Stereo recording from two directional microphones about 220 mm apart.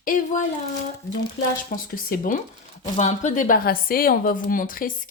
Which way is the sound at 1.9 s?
40° left (ahead or behind).